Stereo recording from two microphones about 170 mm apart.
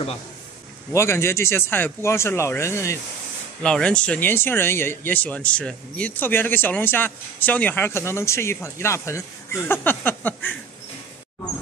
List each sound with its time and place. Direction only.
0.9 s speech: 15° left (ahead or behind)
3.6 s speech: 5° left (ahead or behind)